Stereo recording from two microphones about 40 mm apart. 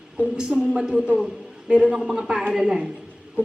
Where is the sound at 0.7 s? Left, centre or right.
Right.